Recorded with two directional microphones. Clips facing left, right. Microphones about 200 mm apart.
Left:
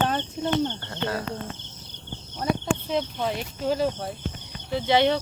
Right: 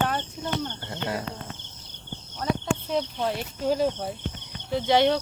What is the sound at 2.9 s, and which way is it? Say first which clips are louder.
Speech: even; centre (ahead or behind).